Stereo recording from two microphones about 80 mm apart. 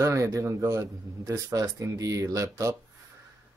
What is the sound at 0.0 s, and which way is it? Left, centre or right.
A man's voice, right.